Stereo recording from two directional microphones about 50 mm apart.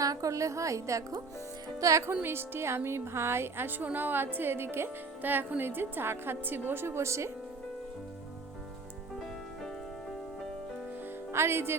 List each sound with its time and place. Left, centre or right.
0.3 s a woman's voice: right
2.2 s a woman's voice: right
5.2 s a woman's voice: right
11.3 s speech: right